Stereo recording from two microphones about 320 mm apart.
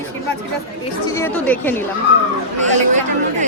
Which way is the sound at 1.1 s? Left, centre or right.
Centre.